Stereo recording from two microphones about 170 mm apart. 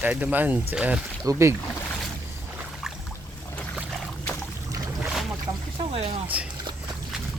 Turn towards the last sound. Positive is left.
turn(degrees=-10)  # may be behind; listen again after turning